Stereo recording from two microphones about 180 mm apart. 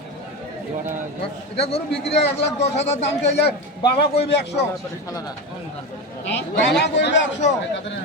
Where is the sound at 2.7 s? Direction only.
40° left (ahead or behind).